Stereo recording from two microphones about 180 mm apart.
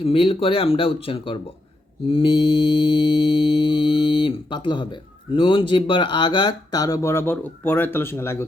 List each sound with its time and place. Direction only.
0.0 s speech: 30° left (ahead or behind); by 8.4 s 15° left (ahead or behind)